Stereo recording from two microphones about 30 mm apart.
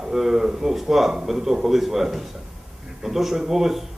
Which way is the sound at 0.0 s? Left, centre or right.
Centre.